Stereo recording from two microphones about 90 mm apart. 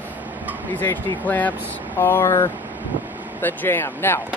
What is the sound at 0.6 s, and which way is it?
Speech, 20° left (ahead or behind).